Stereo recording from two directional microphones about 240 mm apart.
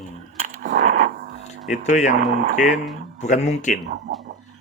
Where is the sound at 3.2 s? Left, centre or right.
Left.